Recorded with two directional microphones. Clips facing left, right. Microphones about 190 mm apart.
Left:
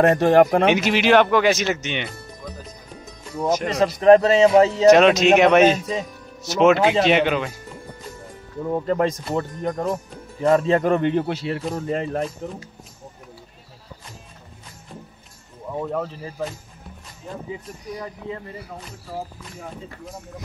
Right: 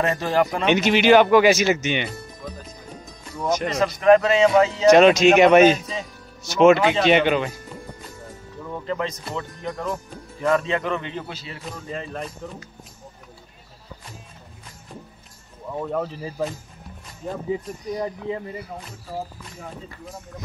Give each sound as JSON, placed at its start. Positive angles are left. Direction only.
{"t": 0.0, "sound": "speech", "side_deg": 55}
{"t": 0.7, "sound": "speech", "side_deg": 5}
{"t": 3.5, "sound": "speech", "side_deg": 0}
{"t": 3.8, "sound": "speech", "side_deg": 30}
{"t": 4.8, "sound": "speech", "side_deg": 0}
{"t": 8.6, "sound": "speech", "side_deg": 40}
{"t": 11.7, "sound": "speech", "side_deg": 50}
{"t": 12.4, "sound": "speech", "side_deg": 30}
{"t": 15.7, "sound": "speech", "side_deg": 0}